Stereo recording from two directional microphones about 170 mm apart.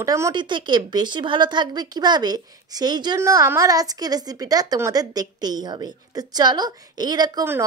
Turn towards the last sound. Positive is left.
turn(degrees=-25)  # may be behind; listen again after turning